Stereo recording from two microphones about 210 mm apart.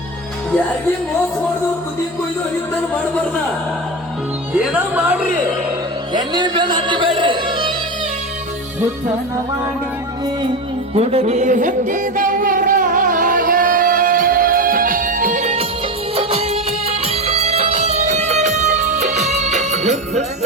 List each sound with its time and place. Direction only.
4.5 s speech: 5° right (ahead or behind)
6.1 s a man's voice: 20° right (ahead or behind)
7.2 s music: 20° right (ahead or behind)
10.9 s music: 30° right (ahead or behind)